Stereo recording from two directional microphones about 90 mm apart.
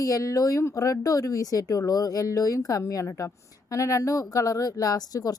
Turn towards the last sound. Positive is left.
turn(degrees=45)  # may be behind; listen again after turning